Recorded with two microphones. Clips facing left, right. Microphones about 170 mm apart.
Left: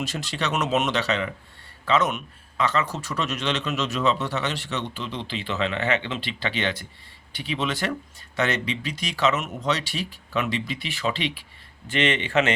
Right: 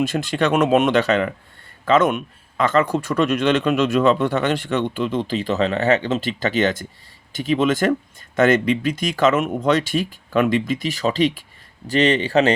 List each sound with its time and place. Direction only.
0.0 s a man's voice: 55° right (ahead or behind); by 12.5 s 35° right (ahead or behind)